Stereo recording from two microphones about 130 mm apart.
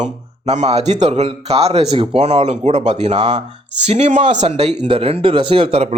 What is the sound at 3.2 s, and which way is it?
Speech, 35° right (ahead or behind).